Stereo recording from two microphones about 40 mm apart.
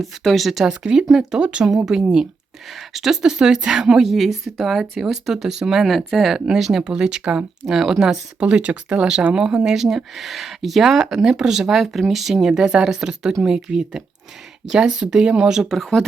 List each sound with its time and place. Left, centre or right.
0.2 s speech: centre
1.4 s speech: right
1.6 s speech: centre
4.0 s speech: centre
5.9 s speech: centre
6.8 s speech: right
8.4 s speech: right
9.0 s speech: centre
9.6 s speech: centre
15.7 s speech: centre